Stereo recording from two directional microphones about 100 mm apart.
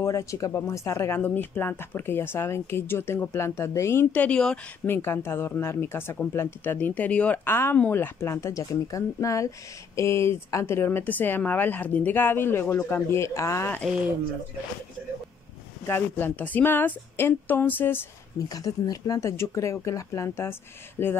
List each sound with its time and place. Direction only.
0.0 s speech: 30° left (ahead or behind); by 4.6 s 10° left (ahead or behind)
4.8 s speech: 25° left (ahead or behind)
15.9 s speech: 20° left (ahead or behind)
18.5 s speech: 40° left (ahead or behind); by 21.2 s 20° left (ahead or behind)